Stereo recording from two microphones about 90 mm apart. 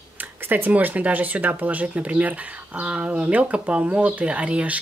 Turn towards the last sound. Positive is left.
turn(degrees=-15)  # may be behind; listen again after turning